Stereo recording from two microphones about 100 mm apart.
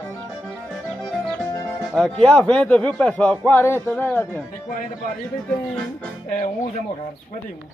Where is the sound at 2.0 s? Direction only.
10° left (ahead or behind).